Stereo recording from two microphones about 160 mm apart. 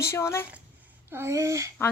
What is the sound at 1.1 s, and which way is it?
Speech, 15° right (ahead or behind).